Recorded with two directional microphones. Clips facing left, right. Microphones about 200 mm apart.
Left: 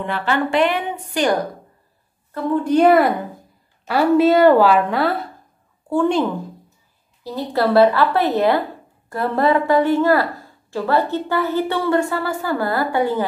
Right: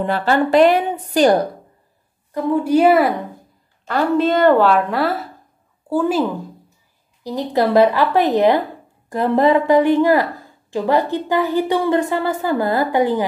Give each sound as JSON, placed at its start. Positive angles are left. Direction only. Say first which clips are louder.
{"t": 0.0, "sound": "a woman's voice", "louder": "right 4 dB", "side_deg": -40}
{"t": 2.3, "sound": "a woman's voice", "louder": "right 1 dB", "side_deg": -10}
{"t": 7.2, "sound": "a woman's voice", "louder": "right 2 dB", "side_deg": -15}